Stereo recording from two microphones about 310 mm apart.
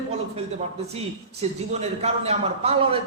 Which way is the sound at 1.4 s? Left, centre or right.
Centre.